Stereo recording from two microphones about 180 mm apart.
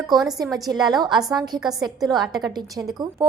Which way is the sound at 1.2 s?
Centre (ahead or behind).